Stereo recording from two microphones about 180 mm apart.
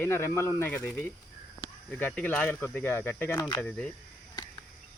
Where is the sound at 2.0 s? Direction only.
5° left (ahead or behind).